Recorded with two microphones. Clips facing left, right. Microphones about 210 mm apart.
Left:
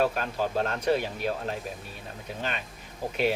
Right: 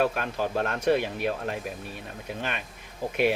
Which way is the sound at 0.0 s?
55° right (ahead or behind).